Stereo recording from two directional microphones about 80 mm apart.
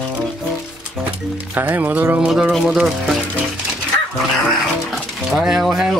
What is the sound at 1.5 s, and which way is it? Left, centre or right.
Speech, right.